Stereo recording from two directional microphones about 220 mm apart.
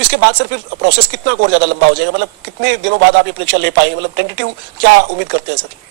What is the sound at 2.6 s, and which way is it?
Speech, 50° right (ahead or behind).